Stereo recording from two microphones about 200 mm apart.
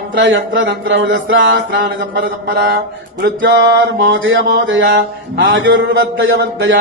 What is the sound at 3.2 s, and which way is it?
Mantra, 55° right (ahead or behind).